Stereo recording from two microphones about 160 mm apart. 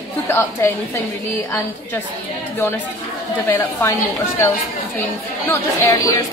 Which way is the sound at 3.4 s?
15° left (ahead or behind).